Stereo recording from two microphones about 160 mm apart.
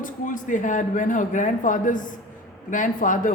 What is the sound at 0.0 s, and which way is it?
A man's voice, 55° left (ahead or behind).